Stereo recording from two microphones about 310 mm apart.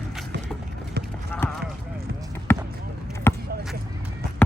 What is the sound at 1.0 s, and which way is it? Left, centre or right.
Clip-clop, right.